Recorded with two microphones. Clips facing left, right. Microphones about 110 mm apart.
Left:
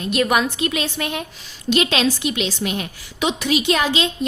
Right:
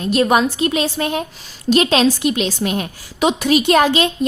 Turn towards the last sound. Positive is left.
turn(degrees=-50)  # may be behind; listen again after turning